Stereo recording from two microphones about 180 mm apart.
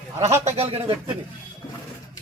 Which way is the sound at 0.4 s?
35° right (ahead or behind).